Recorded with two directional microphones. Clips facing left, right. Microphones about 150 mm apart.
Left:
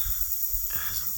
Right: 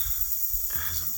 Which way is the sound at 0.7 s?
Centre (ahead or behind).